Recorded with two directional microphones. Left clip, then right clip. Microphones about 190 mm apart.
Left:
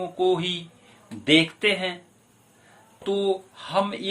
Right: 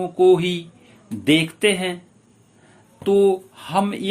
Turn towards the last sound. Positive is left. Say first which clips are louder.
# right 3 dB
turn(degrees=-35)  # may be behind; listen again after turning